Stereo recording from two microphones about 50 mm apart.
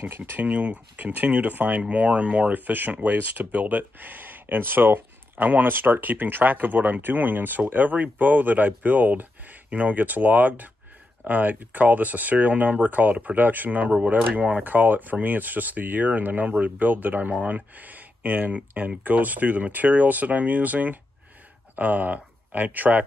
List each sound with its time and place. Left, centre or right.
0.5 s speech: right